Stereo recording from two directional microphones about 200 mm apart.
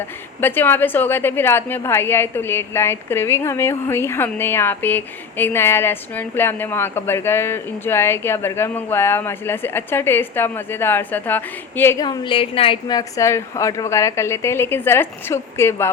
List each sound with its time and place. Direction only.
0.4 s a woman's voice: 10° left (ahead or behind)